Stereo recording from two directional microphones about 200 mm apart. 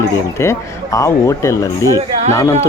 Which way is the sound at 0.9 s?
15° left (ahead or behind).